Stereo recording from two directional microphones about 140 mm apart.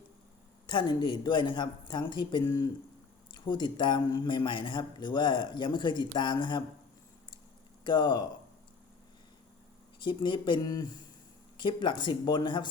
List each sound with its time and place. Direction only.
0.7 s a man's voice: 30° left (ahead or behind)
7.9 s a man's voice: 30° left (ahead or behind)
10.0 s a man's voice: 35° left (ahead or behind)